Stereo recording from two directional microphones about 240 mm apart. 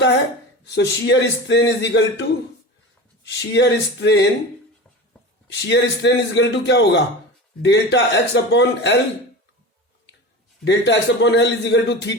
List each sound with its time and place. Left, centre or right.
0.7 s a man's voice: left
5.5 s a man's voice: left
10.6 s a man's voice: left